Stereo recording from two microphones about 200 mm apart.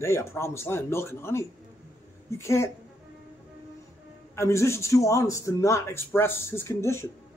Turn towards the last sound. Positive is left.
turn(degrees=15)  # may be behind; listen again after turning